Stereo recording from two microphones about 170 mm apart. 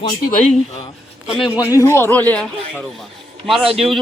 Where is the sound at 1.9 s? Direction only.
15° left (ahead or behind).